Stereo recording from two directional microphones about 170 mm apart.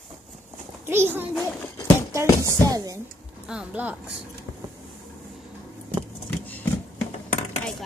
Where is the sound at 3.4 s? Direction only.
5° right (ahead or behind).